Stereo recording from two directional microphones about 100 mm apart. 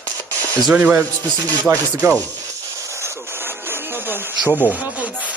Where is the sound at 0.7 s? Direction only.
15° right (ahead or behind).